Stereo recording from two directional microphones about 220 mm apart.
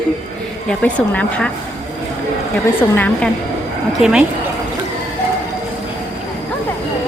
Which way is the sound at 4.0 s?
5° right (ahead or behind).